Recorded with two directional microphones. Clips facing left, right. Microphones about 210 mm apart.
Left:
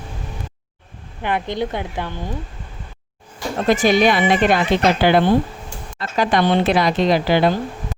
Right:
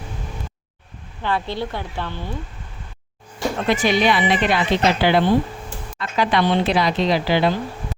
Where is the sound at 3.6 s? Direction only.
40° left (ahead or behind).